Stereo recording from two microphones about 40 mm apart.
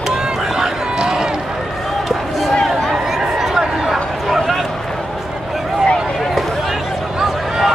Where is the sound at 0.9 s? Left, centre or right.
Centre.